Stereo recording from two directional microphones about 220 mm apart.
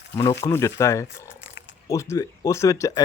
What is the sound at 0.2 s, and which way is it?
Speech, 15° left (ahead or behind).